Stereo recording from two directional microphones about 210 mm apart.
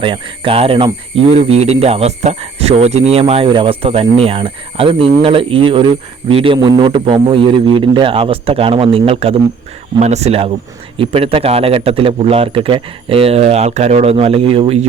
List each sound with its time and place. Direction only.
0.0 s speech: 25° right (ahead or behind)